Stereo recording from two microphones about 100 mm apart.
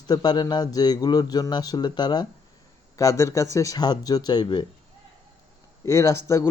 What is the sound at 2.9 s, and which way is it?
Speech, 35° left (ahead or behind).